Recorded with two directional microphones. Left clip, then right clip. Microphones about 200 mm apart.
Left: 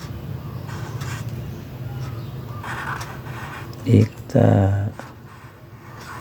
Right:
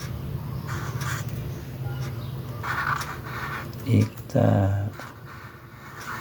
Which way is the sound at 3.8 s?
45° left (ahead or behind).